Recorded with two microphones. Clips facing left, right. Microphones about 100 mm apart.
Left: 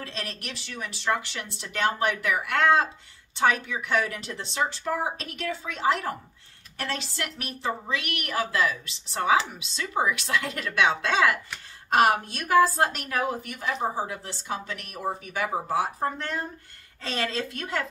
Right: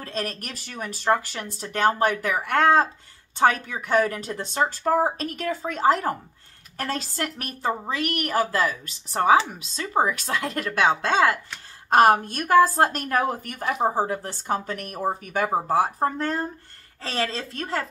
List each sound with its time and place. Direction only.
0.0 s a woman's voice: 40° right (ahead or behind)